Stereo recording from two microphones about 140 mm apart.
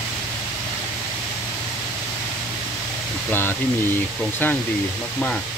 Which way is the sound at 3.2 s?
15° left (ahead or behind).